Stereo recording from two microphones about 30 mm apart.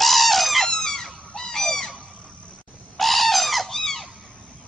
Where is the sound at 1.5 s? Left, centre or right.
Centre.